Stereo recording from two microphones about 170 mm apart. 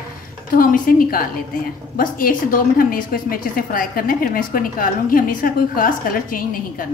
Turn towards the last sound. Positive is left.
turn(degrees=55)  # may be behind; listen again after turning